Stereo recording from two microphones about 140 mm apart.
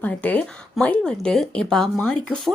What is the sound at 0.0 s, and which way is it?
Speech, 10° left (ahead or behind).